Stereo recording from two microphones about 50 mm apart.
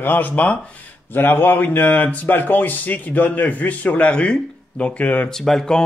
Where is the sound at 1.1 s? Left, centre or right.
Left.